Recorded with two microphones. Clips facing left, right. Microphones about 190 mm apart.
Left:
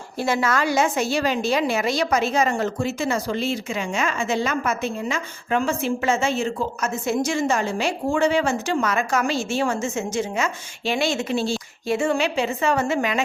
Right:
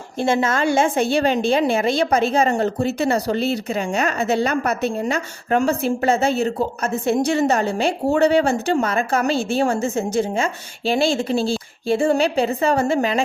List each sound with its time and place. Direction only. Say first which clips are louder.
0.2 s a woman's voice: right 3 dB; 25° right (ahead or behind)